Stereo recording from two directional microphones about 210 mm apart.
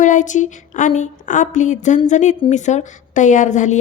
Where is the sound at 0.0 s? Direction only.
35° left (ahead or behind).